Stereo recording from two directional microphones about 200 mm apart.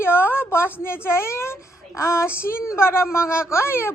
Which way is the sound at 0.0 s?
10° left (ahead or behind).